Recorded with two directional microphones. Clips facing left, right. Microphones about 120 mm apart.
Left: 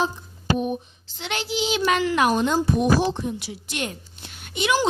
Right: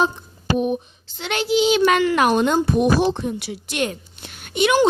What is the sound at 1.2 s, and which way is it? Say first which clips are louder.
A child's voice: right 8 dB; 60° right (ahead or behind).